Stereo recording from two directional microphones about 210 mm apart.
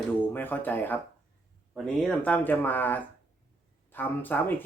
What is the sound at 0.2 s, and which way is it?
Speech, 10° left (ahead or behind).